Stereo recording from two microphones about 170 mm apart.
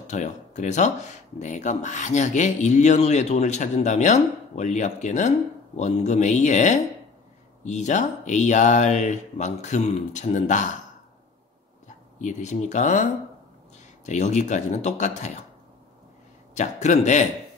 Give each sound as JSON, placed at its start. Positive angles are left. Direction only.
{"t": 0.0, "sound": "speech", "side_deg": 45}
{"t": 12.2, "sound": "speech", "side_deg": 45}
{"t": 16.5, "sound": "speech", "side_deg": 45}